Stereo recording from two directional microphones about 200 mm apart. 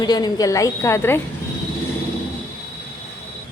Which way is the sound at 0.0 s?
20° left (ahead or behind).